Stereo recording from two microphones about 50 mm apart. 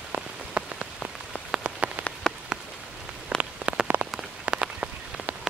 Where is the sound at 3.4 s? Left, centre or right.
Right.